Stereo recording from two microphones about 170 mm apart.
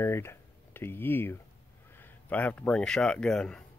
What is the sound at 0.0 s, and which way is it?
Speech, 15° left (ahead or behind).